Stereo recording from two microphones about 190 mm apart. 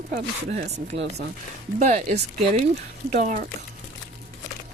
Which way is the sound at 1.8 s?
40° right (ahead or behind).